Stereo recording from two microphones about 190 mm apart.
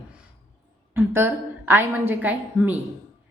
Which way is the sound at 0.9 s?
10° right (ahead or behind).